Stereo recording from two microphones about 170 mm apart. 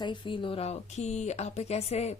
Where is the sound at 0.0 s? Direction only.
30° left (ahead or behind).